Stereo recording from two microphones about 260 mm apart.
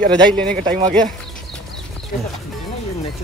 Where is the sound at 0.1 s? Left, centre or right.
Centre.